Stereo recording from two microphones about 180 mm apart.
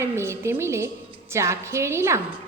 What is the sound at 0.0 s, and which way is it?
A woman's voice, 15° right (ahead or behind).